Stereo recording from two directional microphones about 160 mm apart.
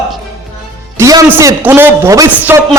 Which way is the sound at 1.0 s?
20° right (ahead or behind).